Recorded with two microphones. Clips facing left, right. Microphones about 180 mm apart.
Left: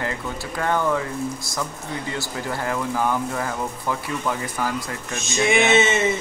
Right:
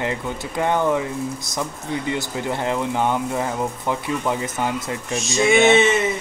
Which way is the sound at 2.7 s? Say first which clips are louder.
Right 1 dB; 20° right (ahead or behind).